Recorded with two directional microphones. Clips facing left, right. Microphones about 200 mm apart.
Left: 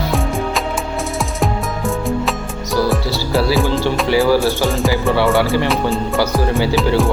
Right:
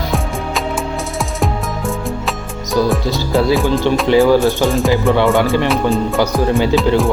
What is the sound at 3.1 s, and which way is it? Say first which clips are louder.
Music: right 2 dB; 20° right (ahead or behind).